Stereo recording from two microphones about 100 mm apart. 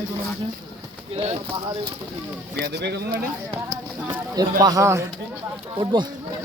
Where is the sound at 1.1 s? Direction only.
85° right.